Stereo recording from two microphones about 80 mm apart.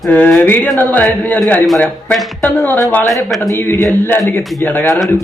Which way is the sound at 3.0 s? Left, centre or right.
Centre.